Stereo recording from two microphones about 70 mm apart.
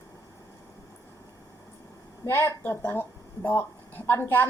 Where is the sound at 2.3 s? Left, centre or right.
Left.